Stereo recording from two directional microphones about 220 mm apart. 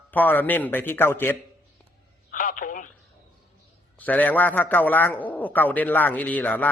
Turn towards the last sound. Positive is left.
turn(degrees=5)  # may be behind; listen again after turning